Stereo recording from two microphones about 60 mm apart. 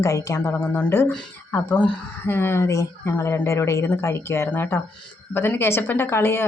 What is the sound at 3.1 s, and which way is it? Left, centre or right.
A woman's voice, left.